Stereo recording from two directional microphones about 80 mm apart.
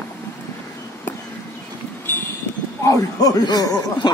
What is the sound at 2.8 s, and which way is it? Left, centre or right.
Speech, left.